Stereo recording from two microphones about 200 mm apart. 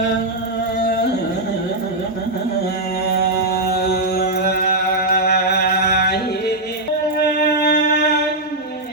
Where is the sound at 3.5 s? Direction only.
50° left (ahead or behind).